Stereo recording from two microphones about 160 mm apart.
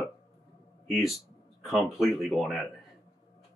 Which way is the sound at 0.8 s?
Centre (ahead or behind).